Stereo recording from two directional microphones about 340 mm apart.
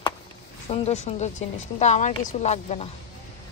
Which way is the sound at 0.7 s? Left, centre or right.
Centre.